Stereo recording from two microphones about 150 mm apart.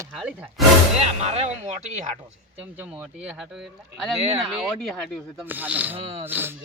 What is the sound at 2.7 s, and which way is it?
Speech, 10° right (ahead or behind).